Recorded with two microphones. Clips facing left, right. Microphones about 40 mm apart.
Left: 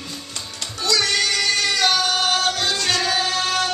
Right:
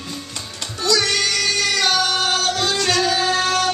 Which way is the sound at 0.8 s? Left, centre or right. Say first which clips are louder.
Right 1 dB; centre.